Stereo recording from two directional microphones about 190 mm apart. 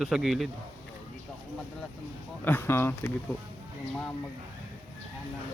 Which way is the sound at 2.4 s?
10° left (ahead or behind).